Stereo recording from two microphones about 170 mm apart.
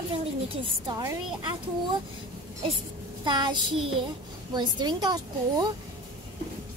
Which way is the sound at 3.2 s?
25° right (ahead or behind).